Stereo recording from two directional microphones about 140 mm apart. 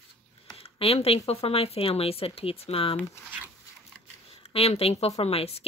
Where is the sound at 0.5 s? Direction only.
45° left (ahead or behind).